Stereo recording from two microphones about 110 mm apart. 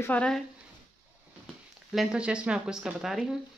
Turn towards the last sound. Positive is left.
turn(degrees=-5)  # may be behind; listen again after turning